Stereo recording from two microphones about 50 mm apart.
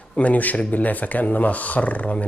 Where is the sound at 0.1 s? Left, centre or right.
Left.